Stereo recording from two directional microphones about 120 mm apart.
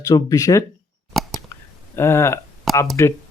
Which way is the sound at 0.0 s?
30° left (ahead or behind).